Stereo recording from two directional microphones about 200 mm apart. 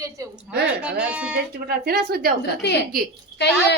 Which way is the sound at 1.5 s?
50° right (ahead or behind).